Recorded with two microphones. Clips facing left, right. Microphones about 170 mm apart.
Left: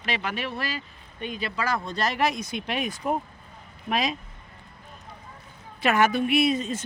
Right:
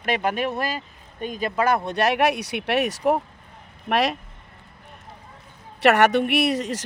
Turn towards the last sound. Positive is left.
turn(degrees=-80)